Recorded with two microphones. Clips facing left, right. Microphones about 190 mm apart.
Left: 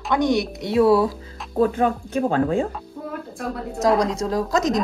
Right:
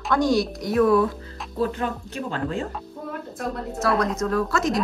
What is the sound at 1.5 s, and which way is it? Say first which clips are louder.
Speech: left 6 dB; 50° left (ahead or behind).